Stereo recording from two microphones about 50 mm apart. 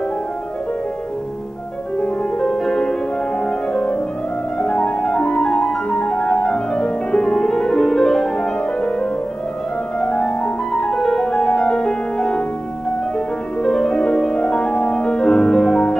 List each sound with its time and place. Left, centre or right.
2.4 s music: centre
13.6 s music: centre